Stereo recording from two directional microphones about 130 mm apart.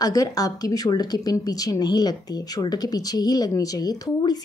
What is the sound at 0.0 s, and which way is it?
A woman's voice, 30° left (ahead or behind).